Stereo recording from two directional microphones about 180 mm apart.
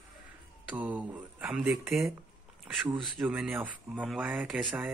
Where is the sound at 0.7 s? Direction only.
10° right (ahead or behind).